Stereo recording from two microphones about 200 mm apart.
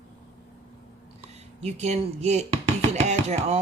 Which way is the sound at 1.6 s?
35° right (ahead or behind).